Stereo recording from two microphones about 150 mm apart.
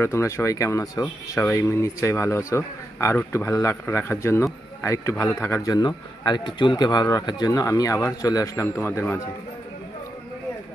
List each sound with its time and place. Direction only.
0.0 s speech: 20° left (ahead or behind)